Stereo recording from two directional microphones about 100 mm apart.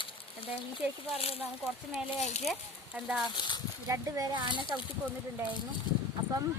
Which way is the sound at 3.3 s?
50° left (ahead or behind).